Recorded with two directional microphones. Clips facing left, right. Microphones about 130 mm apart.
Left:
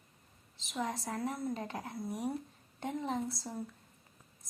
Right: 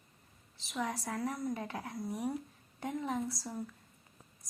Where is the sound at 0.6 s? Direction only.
20° left (ahead or behind).